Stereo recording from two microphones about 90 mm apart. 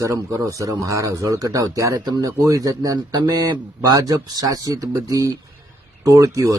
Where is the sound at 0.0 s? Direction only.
35° right (ahead or behind).